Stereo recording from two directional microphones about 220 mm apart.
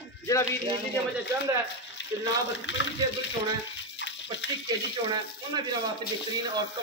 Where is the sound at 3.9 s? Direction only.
55° left (ahead or behind).